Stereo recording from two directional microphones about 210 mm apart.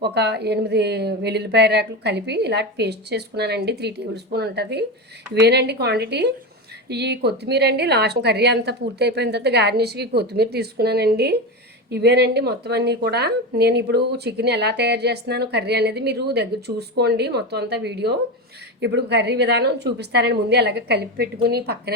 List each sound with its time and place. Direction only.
0.0 s speech: 50° right (ahead or behind)